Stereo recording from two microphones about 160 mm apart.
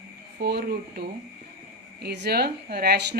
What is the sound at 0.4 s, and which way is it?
Speech, 80° right.